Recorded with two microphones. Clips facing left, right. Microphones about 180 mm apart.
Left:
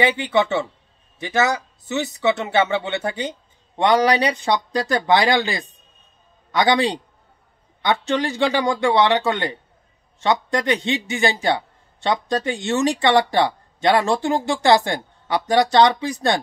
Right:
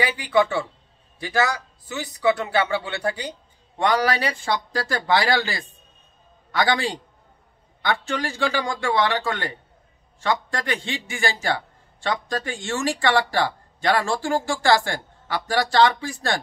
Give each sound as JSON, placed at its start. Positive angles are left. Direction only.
{"t": 0.0, "sound": "a man's voice", "side_deg": 25}